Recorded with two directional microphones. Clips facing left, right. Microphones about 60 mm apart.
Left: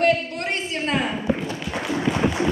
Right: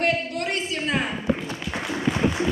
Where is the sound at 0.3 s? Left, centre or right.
Left.